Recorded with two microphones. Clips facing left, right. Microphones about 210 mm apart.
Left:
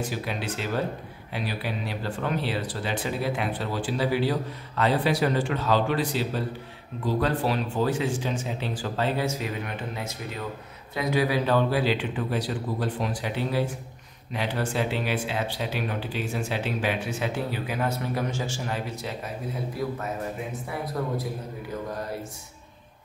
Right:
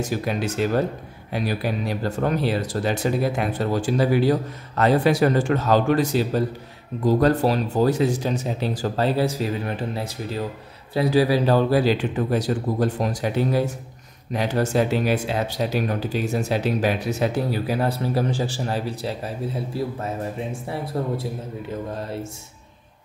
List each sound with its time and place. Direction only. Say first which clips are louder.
0.0 s speech: right 6 dB; 45° right (ahead or behind); by 21.3 s 30° right (ahead or behind)